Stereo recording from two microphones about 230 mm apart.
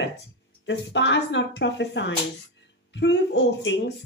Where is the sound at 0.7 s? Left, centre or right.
Left.